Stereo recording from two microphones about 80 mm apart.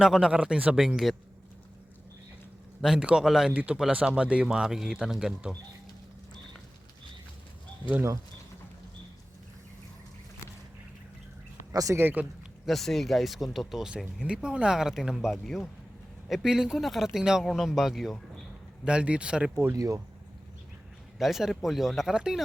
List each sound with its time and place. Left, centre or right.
0.0 s speech: centre
2.8 s speech: centre
3.5 s speech: centre
11.7 s speech: right
11.9 s a man's voice: right
12.6 s speech: centre
18.9 s speech: centre
19.7 s speech: right
21.2 s speech: centre